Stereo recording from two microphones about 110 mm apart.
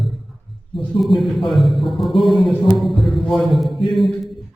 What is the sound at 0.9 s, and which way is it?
A man's voice, centre (ahead or behind).